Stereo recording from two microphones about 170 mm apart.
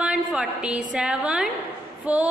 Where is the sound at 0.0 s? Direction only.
5° right (ahead or behind).